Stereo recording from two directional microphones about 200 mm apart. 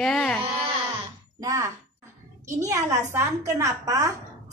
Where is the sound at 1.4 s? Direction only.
15° right (ahead or behind).